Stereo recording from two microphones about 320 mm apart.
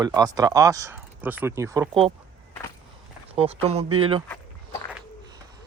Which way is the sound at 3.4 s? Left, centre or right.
Centre.